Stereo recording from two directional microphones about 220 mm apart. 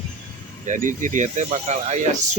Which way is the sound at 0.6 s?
35° right (ahead or behind).